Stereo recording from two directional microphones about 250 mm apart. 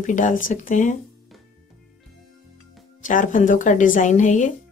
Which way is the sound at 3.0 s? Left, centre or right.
Left.